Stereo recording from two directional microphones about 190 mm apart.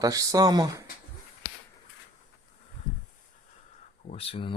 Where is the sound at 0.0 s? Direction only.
20° right (ahead or behind).